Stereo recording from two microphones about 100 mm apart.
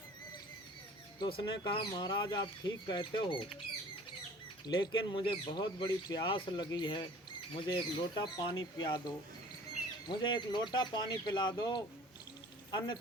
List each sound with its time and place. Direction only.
1.3 s speech: 55° left (ahead or behind)
4.6 s speech: 45° left (ahead or behind)